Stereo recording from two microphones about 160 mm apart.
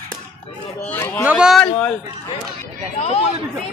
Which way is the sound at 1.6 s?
5° left (ahead or behind).